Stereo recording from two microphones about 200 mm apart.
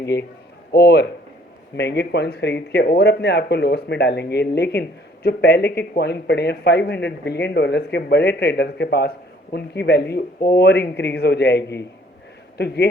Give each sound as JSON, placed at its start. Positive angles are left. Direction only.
{"t": 0.1, "sound": "speech", "side_deg": 55}